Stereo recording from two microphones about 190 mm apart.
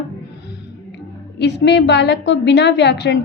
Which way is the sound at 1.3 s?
65° left (ahead or behind).